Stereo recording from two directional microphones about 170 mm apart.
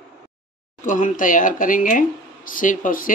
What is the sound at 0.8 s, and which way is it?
Speech, 50° left (ahead or behind).